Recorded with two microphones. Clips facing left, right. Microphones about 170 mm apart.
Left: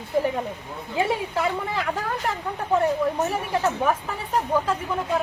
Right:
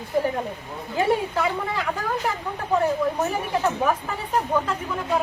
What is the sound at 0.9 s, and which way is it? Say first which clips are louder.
Speech: right 2 dB; centre (ahead or behind).